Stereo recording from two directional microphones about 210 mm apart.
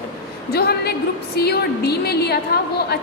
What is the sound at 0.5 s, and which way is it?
A woman's voice, 50° left (ahead or behind).